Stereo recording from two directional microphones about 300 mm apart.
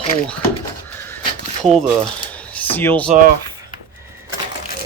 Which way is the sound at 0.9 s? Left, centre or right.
Centre.